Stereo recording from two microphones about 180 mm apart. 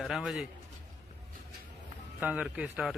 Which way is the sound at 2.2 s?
5° right (ahead or behind).